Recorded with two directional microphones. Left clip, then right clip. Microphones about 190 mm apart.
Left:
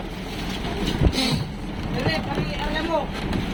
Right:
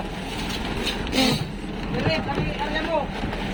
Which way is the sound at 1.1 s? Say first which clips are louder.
Right 5 dB; 20° right (ahead or behind).